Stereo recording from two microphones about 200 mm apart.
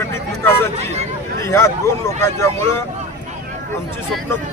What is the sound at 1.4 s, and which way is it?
Speech, 15° left (ahead or behind).